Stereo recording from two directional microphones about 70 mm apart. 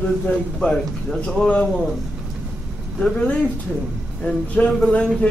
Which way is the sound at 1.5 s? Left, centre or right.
Centre.